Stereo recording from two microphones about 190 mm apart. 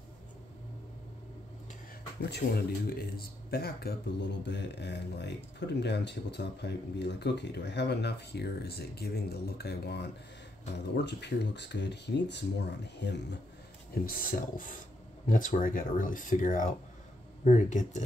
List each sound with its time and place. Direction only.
2.2 s speech: 55° left (ahead or behind)
15.2 s speech: 45° left (ahead or behind)